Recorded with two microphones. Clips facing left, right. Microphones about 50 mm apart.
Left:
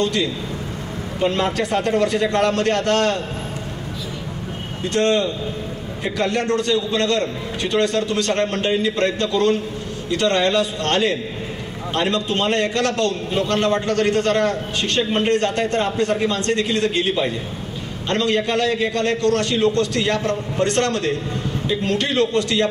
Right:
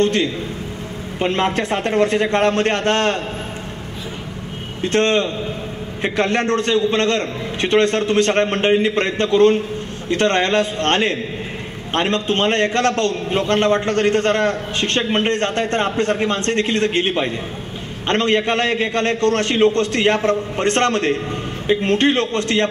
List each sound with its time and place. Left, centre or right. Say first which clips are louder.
0.0 s a man's voice: right 3 dB; right
4.8 s a man's voice: right 2 dB; right